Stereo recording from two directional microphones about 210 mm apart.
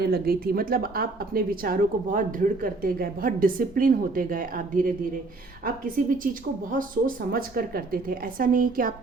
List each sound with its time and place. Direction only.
0.0 s a woman's voice: 45° right (ahead or behind)